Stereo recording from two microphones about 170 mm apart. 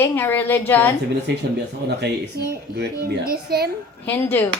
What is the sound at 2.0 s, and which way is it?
Speech, 75° right (ahead or behind).